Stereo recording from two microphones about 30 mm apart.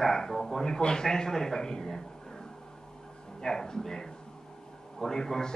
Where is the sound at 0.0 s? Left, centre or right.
Centre.